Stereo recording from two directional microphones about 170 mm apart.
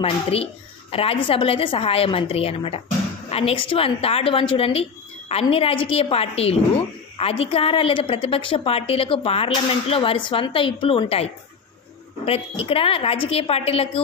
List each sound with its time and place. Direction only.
0.0 s a woman's voice: 35° left (ahead or behind)